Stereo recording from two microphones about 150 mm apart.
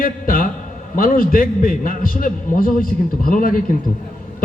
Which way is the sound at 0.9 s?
70° left (ahead or behind).